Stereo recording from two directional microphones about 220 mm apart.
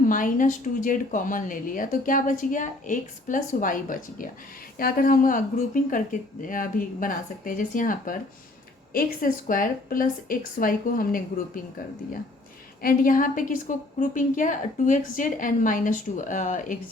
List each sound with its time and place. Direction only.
0.0 s a woman's voice: 40° left (ahead or behind)
12.8 s a woman's voice: 40° left (ahead or behind)